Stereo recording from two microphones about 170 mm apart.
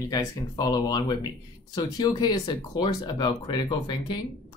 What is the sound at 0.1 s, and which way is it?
Speech, 20° left (ahead or behind).